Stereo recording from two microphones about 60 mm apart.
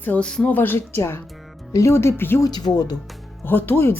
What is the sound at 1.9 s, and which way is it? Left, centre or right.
Speech, left.